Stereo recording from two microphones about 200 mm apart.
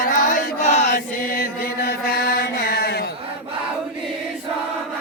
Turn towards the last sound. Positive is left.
turn(degrees=55)  # may be behind; listen again after turning